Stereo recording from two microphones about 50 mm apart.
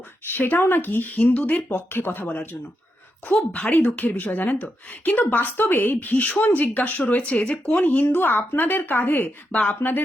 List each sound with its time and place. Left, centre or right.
0.3 s speech: left
1.0 s speech: left
1.9 s a woman's voice: left
3.5 s a woman's voice: left
7.8 s a woman's voice: left